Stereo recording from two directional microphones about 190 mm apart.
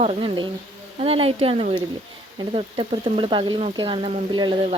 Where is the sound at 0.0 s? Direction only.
30° right (ahead or behind).